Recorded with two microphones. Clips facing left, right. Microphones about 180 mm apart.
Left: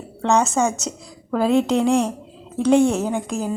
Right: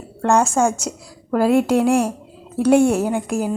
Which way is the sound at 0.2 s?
10° right (ahead or behind).